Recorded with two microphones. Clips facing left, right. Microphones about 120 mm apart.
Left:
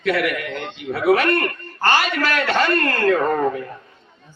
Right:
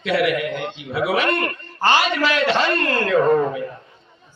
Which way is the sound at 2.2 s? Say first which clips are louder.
Right 1 dB; 50° left (ahead or behind).